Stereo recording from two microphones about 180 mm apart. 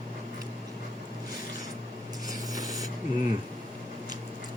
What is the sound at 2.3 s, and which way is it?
Mechanisms, 20° right (ahead or behind).